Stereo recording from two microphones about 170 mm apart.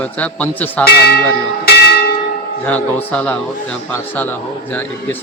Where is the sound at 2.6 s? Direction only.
10° left (ahead or behind).